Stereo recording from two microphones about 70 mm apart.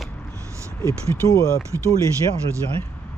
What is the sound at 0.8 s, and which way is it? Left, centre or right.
Speech, left.